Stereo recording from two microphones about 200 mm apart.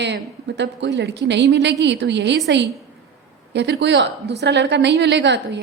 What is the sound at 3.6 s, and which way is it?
A woman's voice, 60° right (ahead or behind).